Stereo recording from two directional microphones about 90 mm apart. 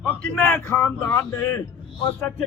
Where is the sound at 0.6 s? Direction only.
30° left (ahead or behind).